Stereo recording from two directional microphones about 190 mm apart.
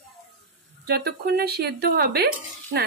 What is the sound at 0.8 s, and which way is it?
A woman's voice, 60° right (ahead or behind).